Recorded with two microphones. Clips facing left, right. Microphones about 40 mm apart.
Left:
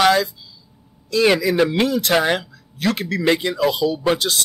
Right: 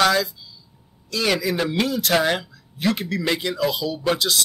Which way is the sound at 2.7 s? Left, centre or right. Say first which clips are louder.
Left 1 dB; left.